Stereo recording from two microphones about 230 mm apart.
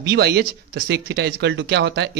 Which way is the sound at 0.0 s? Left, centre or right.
Right.